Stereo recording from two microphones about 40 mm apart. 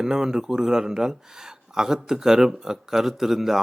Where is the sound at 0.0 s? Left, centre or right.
Centre.